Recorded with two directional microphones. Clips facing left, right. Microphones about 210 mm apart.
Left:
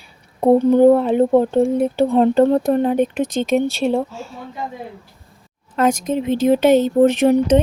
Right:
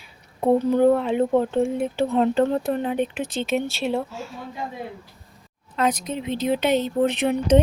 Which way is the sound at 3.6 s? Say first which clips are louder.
Left 7 dB; centre (ahead or behind).